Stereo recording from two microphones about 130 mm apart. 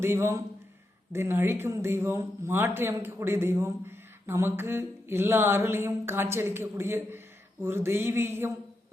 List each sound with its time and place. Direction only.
0.0 s speech: 20° right (ahead or behind)